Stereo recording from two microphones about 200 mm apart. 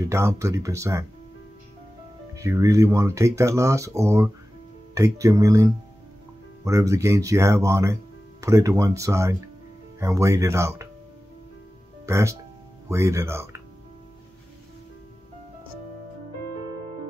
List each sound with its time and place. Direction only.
0.1 s speech: 15° right (ahead or behind)
2.3 s speech: 15° right (ahead or behind)
12.1 s speech: 15° right (ahead or behind)